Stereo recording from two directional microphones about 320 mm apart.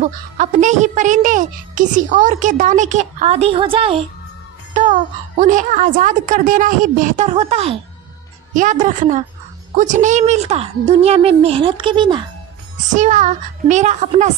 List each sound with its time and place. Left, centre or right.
0.0 s a woman's voice: right